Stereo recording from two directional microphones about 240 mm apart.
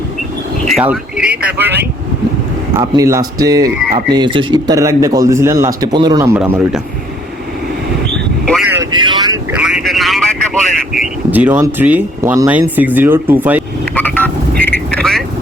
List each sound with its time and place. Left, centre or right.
0.7 s a man's voice: centre
8.7 s vehicle: centre
9.6 s vehicle: centre
11.3 s a man's voice: centre
13.9 s telephone dialing: centre
14.6 s vehicle: centre